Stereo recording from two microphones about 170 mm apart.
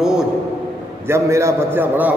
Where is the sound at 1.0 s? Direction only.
15° right (ahead or behind).